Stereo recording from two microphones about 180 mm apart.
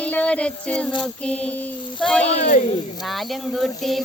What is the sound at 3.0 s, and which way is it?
Female singing, centre (ahead or behind).